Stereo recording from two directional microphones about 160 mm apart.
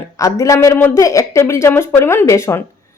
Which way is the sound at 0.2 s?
20° left (ahead or behind).